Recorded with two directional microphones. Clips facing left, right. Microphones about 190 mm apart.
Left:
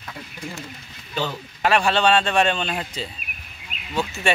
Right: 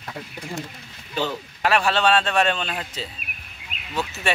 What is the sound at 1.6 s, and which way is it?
Speech, centre (ahead or behind).